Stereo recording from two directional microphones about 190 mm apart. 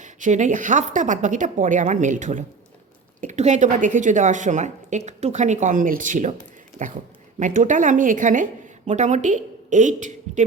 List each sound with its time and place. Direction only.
0.0 s a woman's voice: 40° right (ahead or behind)